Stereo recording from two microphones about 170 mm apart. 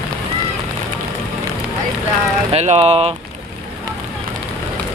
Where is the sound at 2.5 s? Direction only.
40° right (ahead or behind).